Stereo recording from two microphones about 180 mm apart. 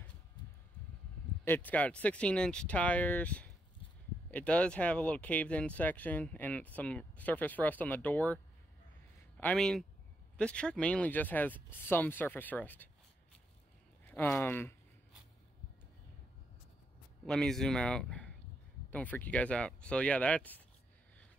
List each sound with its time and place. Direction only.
1.4 s speech: 10° left (ahead or behind)
9.4 s speech: 5° left (ahead or behind)
14.0 s speech: 10° left (ahead or behind)
17.3 s speech: 5° left (ahead or behind)